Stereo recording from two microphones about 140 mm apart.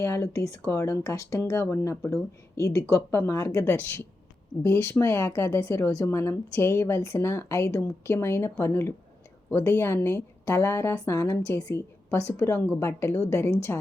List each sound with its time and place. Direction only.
0.0 s speech: 20° left (ahead or behind)
3.5 s a woman's voice: 10° left (ahead or behind)